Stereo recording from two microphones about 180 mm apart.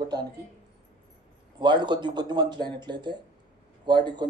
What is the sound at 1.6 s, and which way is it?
A man's voice, 25° right (ahead or behind).